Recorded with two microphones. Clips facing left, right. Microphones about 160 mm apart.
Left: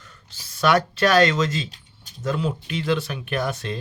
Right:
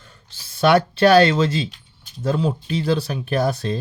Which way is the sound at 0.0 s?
30° right (ahead or behind).